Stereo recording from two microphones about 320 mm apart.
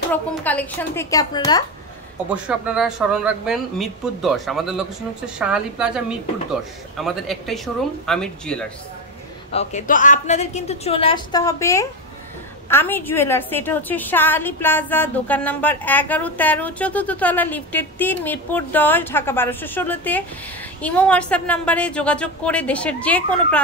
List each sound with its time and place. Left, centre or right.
0.1 s a woman's voice: centre
2.3 s a woman's voice: centre
9.5 s a woman's voice: left; by 23.6 s centre